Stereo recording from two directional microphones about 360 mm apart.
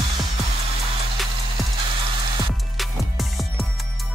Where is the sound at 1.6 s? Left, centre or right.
Centre.